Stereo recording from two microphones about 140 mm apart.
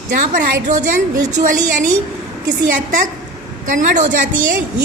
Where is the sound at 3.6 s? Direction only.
65° right (ahead or behind).